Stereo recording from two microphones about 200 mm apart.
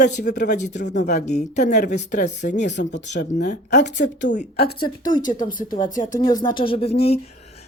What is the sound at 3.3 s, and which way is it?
Speech, 35° left (ahead or behind).